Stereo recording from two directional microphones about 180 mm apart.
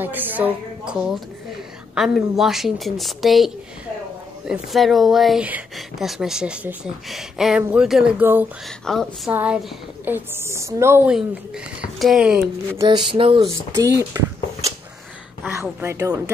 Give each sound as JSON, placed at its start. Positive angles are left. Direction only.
{"t": 0.0, "sound": "a woman's voice", "side_deg": -10}
{"t": 8.6, "sound": "a woman's voice", "side_deg": 0}
{"t": 12.7, "sound": "a sound", "side_deg": -25}
{"t": 13.7, "sound": "a woman's voice", "side_deg": -15}
{"t": 15.4, "sound": "a woman's voice", "side_deg": -10}